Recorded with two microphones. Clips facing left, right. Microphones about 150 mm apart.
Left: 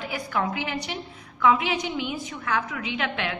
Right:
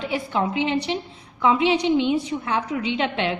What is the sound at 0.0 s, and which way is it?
A woman's voice, 25° right (ahead or behind).